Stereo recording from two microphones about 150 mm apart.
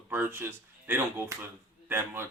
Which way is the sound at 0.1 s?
15° right (ahead or behind).